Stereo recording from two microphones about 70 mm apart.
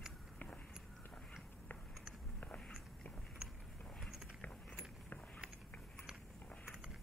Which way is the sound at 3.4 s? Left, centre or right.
Centre.